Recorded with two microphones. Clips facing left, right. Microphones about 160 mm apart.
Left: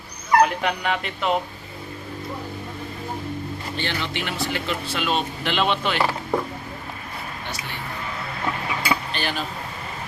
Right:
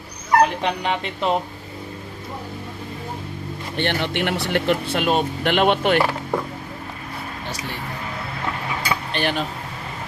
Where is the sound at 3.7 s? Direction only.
60° right (ahead or behind).